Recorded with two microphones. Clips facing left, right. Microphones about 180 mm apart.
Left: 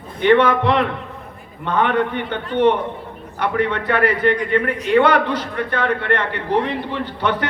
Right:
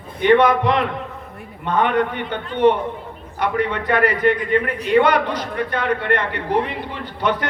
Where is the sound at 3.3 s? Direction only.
10° right (ahead or behind).